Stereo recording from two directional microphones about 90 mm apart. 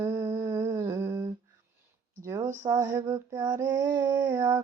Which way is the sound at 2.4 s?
35° right (ahead or behind).